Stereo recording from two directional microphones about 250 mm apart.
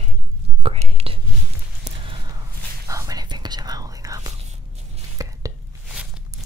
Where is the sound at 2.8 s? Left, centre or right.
Centre.